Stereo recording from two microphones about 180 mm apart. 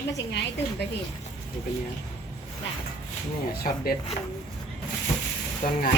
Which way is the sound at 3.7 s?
40° left (ahead or behind).